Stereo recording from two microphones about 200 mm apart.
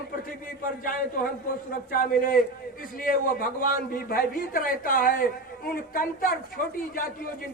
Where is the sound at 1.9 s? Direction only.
45° left (ahead or behind).